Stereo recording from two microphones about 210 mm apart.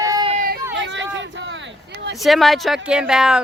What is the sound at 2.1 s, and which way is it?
Speech, centre (ahead or behind).